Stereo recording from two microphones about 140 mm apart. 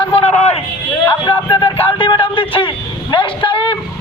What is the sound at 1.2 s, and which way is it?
A man's voice, 30° left (ahead or behind).